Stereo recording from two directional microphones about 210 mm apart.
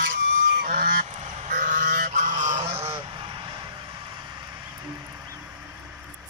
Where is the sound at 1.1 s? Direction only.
35° right (ahead or behind).